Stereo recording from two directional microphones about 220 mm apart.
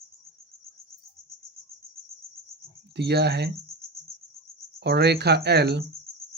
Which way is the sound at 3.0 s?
50° right (ahead or behind).